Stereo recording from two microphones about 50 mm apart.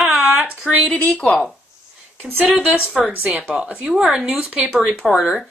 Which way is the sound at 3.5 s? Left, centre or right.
Centre.